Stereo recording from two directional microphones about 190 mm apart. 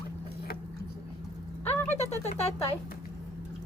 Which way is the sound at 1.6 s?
10° left (ahead or behind).